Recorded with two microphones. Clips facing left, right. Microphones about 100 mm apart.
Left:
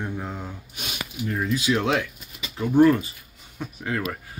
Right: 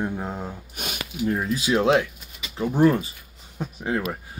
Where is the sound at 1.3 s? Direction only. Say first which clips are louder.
Even; 30° right (ahead or behind).